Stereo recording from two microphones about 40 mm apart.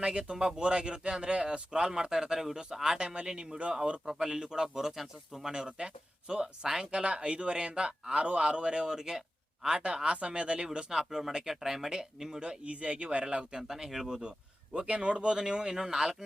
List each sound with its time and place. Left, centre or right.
0.0 s speech: right
4.0 s speech: centre
5.5 s speech: right
10.7 s speech: centre
12.4 s speech: right
13.2 s speech: centre
14.2 s speech: right